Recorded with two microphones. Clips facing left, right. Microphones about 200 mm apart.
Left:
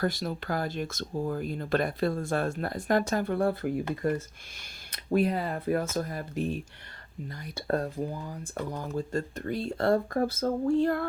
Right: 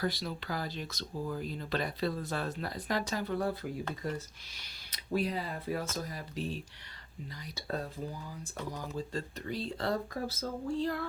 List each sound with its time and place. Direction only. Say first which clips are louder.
0.0 s speech: left 5 dB; 50° left (ahead or behind)